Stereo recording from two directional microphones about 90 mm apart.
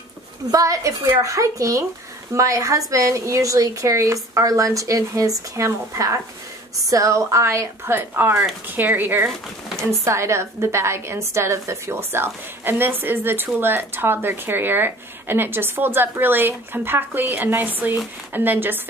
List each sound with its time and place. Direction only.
0.5 s a woman's voice: 40° right (ahead or behind); by 18.8 s 20° right (ahead or behind)